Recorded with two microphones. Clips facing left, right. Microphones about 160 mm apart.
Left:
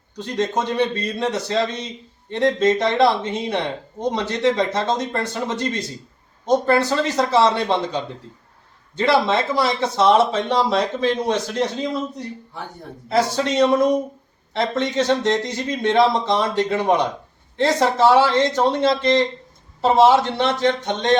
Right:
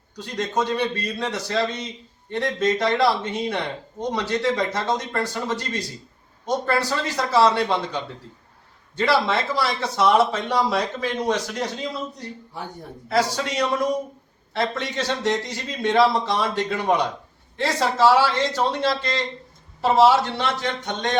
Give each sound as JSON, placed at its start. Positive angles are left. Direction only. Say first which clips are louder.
{"t": 0.2, "sound": "speech", "louder": "left 2 dB", "side_deg": 20}
{"t": 13.1, "sound": "speech", "louder": "left 3 dB", "side_deg": 20}